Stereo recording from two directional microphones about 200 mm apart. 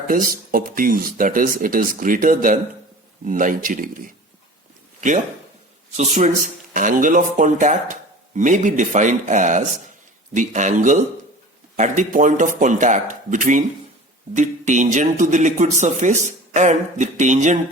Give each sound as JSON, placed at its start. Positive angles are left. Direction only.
{"t": 0.1, "sound": "speech", "side_deg": -45}